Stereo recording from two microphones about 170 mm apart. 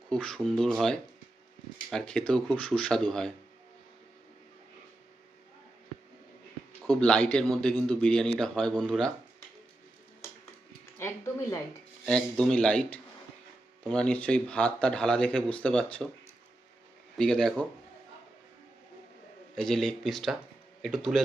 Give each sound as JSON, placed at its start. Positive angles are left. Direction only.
{"t": 0.1, "sound": "a man's voice", "side_deg": 5}
{"t": 6.8, "sound": "a man's voice", "side_deg": 5}
{"t": 10.9, "sound": "speech", "side_deg": 15}
{"t": 12.0, "sound": "a man's voice", "side_deg": 5}
{"t": 17.2, "sound": "a man's voice", "side_deg": 5}
{"t": 19.5, "sound": "a man's voice", "side_deg": 5}